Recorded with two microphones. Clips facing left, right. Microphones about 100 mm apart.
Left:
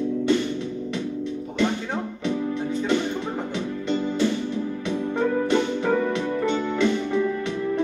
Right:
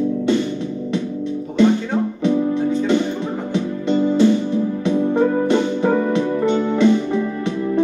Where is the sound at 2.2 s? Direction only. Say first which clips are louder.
Right 8 dB; 25° right (ahead or behind).